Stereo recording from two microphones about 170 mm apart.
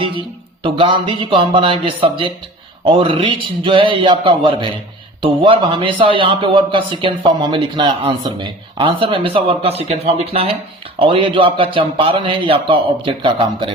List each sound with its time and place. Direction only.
0.0 s a man's voice: 30° right (ahead or behind)